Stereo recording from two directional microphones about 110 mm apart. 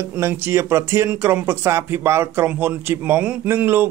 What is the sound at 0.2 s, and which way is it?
Speech, 25° right (ahead or behind).